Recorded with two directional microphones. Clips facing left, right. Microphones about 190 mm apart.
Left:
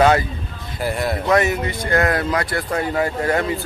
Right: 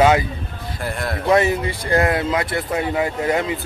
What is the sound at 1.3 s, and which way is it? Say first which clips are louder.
Speech: right 2 dB; 30° right (ahead or behind).